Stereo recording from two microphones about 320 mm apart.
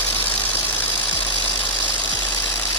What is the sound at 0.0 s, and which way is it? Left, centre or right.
Vehicle, centre.